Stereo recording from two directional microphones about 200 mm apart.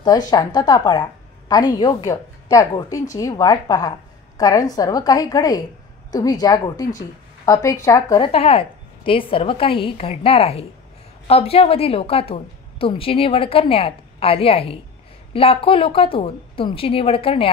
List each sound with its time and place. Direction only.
0.0 s a woman's voice: 20° left (ahead or behind)
8.3 s a woman's voice: 30° left (ahead or behind)